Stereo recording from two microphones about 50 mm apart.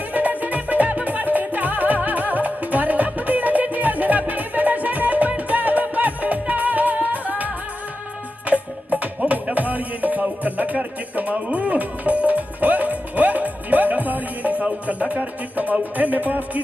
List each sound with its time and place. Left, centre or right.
0.1 s music: right